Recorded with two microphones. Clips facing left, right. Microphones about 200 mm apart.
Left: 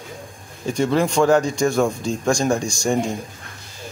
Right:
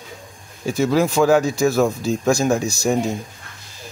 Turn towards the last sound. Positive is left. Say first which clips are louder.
# right 1 dB
turn(degrees=-5)  # may be behind; listen again after turning